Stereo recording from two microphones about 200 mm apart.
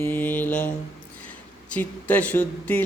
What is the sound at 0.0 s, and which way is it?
Mantra, 10° left (ahead or behind).